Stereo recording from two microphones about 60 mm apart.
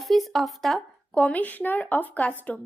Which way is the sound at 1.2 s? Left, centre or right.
Left.